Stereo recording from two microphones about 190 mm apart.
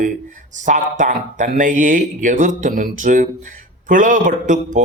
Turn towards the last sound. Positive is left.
turn(degrees=-40)  # may be behind; listen again after turning